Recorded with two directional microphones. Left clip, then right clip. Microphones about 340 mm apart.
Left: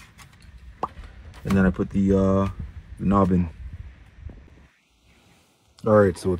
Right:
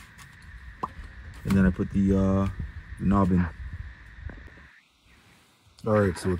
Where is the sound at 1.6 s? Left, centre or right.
Left.